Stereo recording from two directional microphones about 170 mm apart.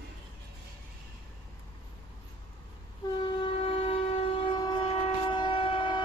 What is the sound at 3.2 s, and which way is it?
Train, 30° left (ahead or behind).